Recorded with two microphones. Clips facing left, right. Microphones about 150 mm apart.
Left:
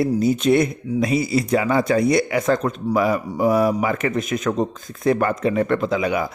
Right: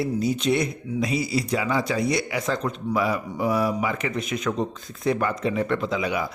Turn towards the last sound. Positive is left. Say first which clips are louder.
# left 5 dB
turn(degrees=50)  # may be behind; listen again after turning